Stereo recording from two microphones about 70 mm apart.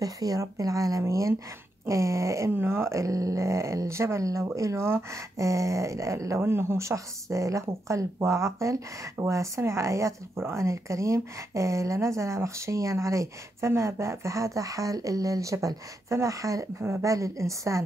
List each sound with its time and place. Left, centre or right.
0.0 s speech: right